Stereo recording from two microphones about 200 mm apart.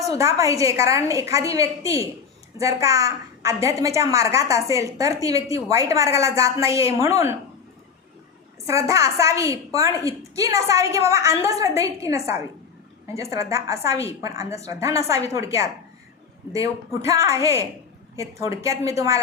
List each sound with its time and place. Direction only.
0.1 s a woman's voice: 15° right (ahead or behind)
8.6 s a woman's voice: 15° right (ahead or behind)